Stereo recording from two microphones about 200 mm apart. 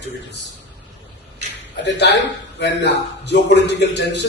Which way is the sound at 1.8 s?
60° left (ahead or behind).